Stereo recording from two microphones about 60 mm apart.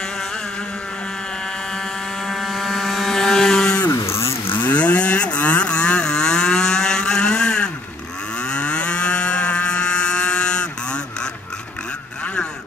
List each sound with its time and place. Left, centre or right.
2.2 s a sound: centre
3.9 s vehicle: left
4.5 s vehicle: left; by 7.7 s centre
8.4 s moo: centre